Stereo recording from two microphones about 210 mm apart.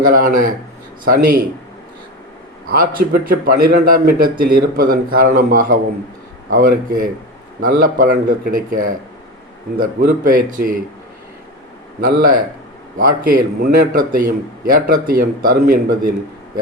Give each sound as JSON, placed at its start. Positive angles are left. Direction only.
{"t": 0.0, "sound": "a man's voice", "side_deg": -40}
{"t": 2.6, "sound": "a man's voice", "side_deg": -45}
{"t": 11.9, "sound": "a man's voice", "side_deg": -45}